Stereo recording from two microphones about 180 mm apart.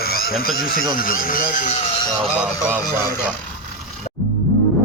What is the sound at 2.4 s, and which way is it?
Music, 10° right (ahead or behind).